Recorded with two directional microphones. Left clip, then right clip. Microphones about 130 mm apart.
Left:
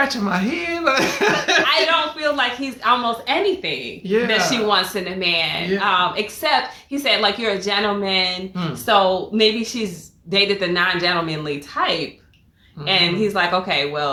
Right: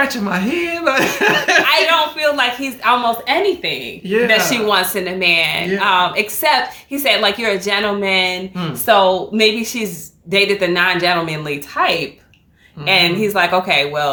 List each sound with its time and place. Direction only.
0.0 s speech: 5° left (ahead or behind)
1.6 s a woman's voice: 35° right (ahead or behind)
4.7 s a woman's voice: 30° right (ahead or behind)